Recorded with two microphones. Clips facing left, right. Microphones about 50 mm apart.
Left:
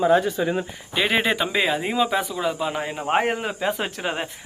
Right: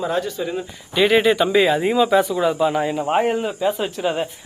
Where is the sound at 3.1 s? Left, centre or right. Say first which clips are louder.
Right 1 dB; left.